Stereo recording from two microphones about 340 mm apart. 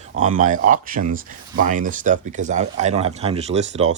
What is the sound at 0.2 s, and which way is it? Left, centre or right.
Speech, right.